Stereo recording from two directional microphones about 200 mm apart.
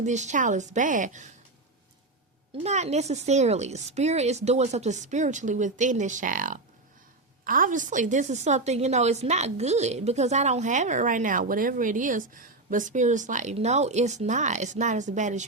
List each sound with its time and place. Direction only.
0.0 s a woman's voice: 35° right (ahead or behind)
2.6 s a woman's voice: 35° right (ahead or behind)